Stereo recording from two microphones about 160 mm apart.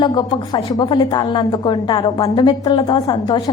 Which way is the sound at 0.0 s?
25° left (ahead or behind).